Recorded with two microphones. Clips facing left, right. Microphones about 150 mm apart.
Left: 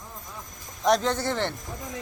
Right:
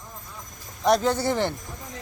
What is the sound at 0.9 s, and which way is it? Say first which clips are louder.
Speech: right 2 dB; 10° right (ahead or behind).